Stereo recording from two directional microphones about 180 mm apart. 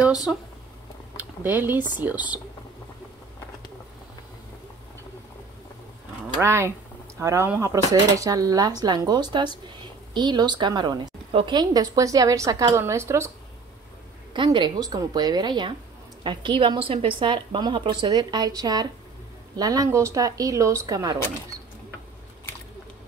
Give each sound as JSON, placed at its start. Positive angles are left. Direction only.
{"t": 0.3, "sound": "speech", "side_deg": 0}
{"t": 6.3, "sound": "a woman's voice", "side_deg": -15}
{"t": 14.3, "sound": "a woman's voice", "side_deg": -25}